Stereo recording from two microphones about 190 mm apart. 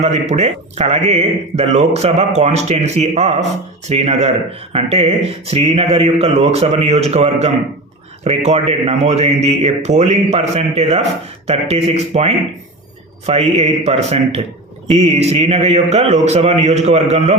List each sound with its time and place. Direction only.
0.0 s speech: 35° right (ahead or behind)